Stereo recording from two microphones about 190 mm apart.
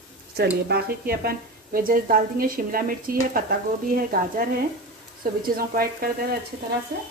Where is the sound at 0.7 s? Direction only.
55° right (ahead or behind).